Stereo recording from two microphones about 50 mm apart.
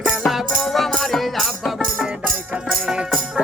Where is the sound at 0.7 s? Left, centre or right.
Centre.